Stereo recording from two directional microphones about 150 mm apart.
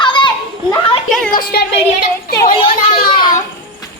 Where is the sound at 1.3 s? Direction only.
75° left (ahead or behind).